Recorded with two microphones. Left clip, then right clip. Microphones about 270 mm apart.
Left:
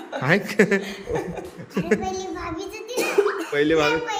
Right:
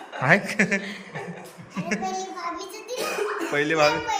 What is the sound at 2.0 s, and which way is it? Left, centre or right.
A child's voice, centre.